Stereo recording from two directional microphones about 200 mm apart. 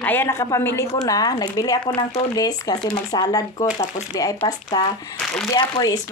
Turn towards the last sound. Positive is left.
turn(degrees=20)  # may be behind; listen again after turning